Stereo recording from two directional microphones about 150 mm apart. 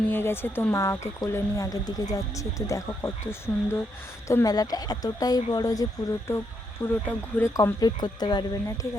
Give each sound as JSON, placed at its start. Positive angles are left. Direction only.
{"t": 0.1, "sound": "speech", "side_deg": 15}